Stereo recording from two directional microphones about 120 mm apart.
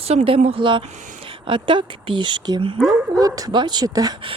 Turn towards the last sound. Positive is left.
turn(degrees=-35)  # may be behind; listen again after turning